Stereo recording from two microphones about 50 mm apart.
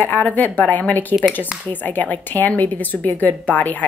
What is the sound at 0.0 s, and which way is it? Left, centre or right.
A woman's voice, left.